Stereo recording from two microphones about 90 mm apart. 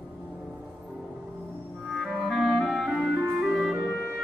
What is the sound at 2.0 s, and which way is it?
Clarinet, centre (ahead or behind).